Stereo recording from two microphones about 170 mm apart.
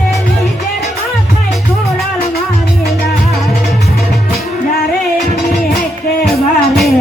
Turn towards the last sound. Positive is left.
turn(degrees=0)  # may be behind; listen again after turning